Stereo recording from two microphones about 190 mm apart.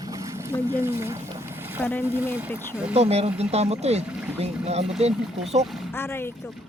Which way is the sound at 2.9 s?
35° right (ahead or behind).